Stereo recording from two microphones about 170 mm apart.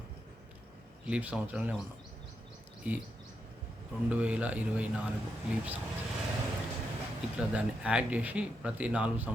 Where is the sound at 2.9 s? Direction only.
10° right (ahead or behind).